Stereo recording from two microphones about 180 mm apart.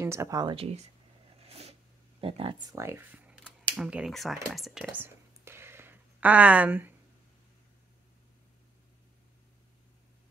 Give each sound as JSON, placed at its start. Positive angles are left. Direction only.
{"t": 0.0, "sound": "speech", "side_deg": -15}
{"t": 0.6, "sound": "speech", "side_deg": -35}
{"t": 1.5, "sound": "a sound", "side_deg": -35}
{"t": 2.7, "sound": "speech", "side_deg": -15}